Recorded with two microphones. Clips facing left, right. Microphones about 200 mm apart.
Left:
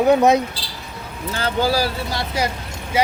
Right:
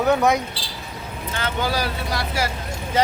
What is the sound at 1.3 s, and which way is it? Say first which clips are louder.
Speech: left 5 dB; 35° left (ahead or behind).